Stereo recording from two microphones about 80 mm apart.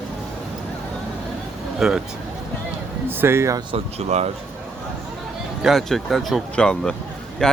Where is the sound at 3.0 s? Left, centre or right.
Right.